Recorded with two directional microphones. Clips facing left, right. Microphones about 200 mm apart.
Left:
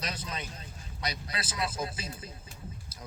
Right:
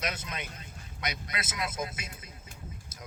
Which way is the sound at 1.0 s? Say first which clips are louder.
Even; 30° left (ahead or behind).